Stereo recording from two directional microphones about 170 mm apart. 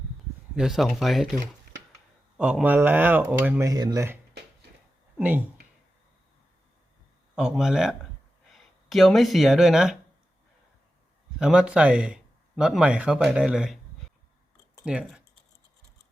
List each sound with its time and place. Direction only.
0.5 s speech: centre (ahead or behind)
2.4 s speech: 5° right (ahead or behind)
3.7 s speech: 20° right (ahead or behind)
7.3 s speech: centre (ahead or behind)
11.3 s speech: 5° right (ahead or behind)
14.8 s speech: 5° right (ahead or behind)